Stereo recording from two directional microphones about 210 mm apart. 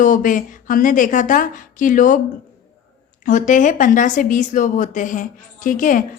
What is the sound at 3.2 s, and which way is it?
A woman's voice, 35° left (ahead or behind).